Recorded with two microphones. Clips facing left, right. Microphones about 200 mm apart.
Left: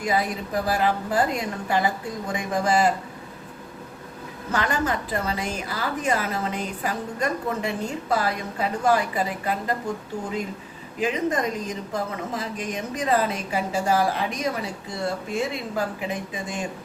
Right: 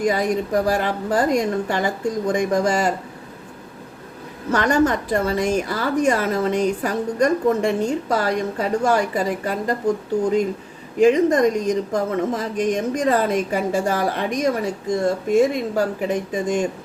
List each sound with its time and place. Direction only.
0.0 s speech: 45° right (ahead or behind)
4.5 s speech: 45° right (ahead or behind)
11.0 s speech: 45° right (ahead or behind)